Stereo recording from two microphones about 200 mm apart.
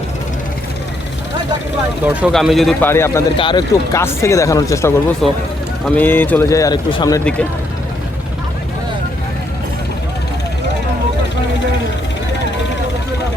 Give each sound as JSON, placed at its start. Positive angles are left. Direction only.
{"t": 2.0, "sound": "speech", "side_deg": -5}
{"t": 2.9, "sound": "speech", "side_deg": 10}
{"t": 3.3, "sound": "speech", "side_deg": 25}
{"t": 5.2, "sound": "speech", "side_deg": 0}